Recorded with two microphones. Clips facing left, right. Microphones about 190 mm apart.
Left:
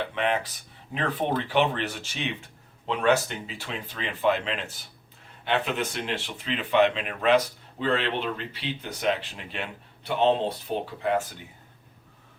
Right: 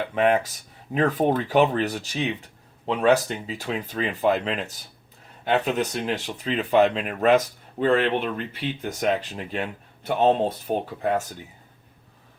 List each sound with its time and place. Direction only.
0.1 s speech: 45° right (ahead or behind)